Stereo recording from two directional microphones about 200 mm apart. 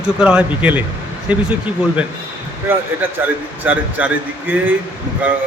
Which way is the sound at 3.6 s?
10° right (ahead or behind).